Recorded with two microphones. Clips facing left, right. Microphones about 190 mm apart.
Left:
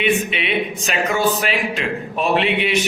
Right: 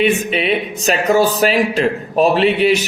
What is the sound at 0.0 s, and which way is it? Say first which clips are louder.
Speech: right 4 dB; 40° right (ahead or behind).